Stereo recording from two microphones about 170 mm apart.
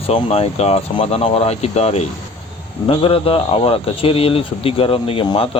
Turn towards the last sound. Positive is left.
turn(degrees=35)  # may be behind; listen again after turning